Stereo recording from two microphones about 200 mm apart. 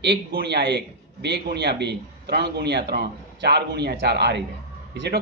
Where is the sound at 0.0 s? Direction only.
55° right (ahead or behind).